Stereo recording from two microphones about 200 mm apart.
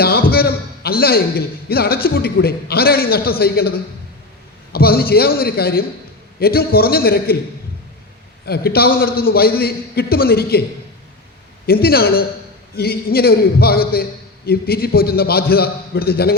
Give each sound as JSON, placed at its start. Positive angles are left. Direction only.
{"t": 0.0, "sound": "a man's voice", "side_deg": 50}
{"t": 8.4, "sound": "a man's voice", "side_deg": 50}
{"t": 11.6, "sound": "a man's voice", "side_deg": 50}